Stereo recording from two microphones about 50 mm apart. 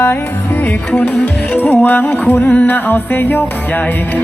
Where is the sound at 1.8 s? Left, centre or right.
Left.